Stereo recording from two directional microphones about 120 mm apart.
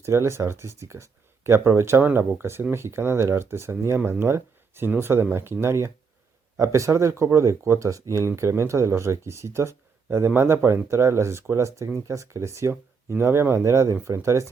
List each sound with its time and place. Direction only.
0.0 s speech: 20° right (ahead or behind)